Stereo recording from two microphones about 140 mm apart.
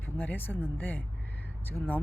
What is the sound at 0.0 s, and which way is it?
Speech, 10° left (ahead or behind).